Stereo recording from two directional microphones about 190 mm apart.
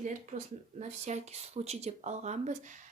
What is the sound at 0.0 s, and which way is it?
Speech, 40° right (ahead or behind).